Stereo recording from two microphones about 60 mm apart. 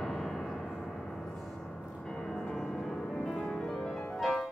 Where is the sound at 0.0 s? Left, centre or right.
Centre.